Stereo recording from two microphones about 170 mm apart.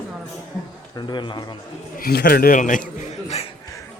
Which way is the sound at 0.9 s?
25° left (ahead or behind).